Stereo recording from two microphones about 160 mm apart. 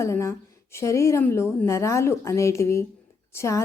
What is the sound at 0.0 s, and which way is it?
A woman's voice, 20° left (ahead or behind).